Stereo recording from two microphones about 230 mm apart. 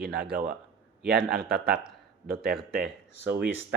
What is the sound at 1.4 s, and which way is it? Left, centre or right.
Speech, right.